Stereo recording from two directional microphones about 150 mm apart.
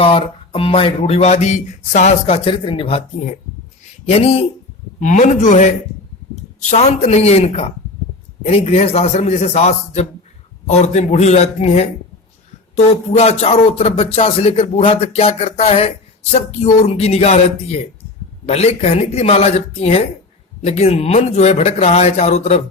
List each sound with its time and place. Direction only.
0.0 s speech: 35° left (ahead or behind)
4.9 s a man's voice: 55° left (ahead or behind)